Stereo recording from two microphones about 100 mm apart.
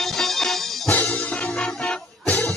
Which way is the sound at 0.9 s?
15° left (ahead or behind).